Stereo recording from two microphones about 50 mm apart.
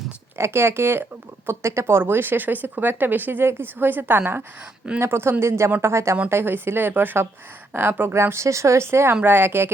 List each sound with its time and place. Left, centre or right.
0.3 s speech: right
4.9 s speech: right
6.2 s speech: right
9.2 s speech: right